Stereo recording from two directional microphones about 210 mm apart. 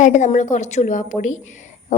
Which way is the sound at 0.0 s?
35° left (ahead or behind).